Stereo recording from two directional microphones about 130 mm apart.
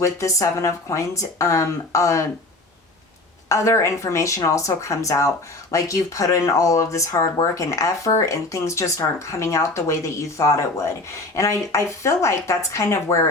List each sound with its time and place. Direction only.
0.0 s speech: 25° left (ahead or behind)
3.5 s speech: 25° left (ahead or behind)